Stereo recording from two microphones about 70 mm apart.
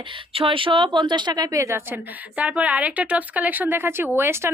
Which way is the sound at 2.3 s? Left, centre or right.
Centre.